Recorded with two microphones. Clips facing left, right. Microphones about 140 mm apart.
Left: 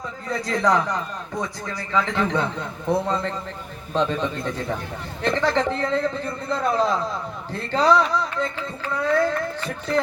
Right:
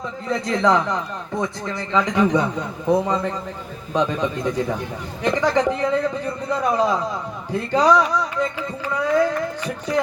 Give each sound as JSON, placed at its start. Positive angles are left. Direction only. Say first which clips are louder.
{"t": 0.3, "sound": "a man's voice", "louder": "right 3 dB", "side_deg": -20}